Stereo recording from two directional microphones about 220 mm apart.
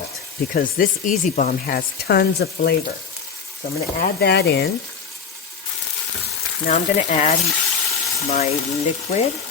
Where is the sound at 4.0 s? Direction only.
45° left (ahead or behind).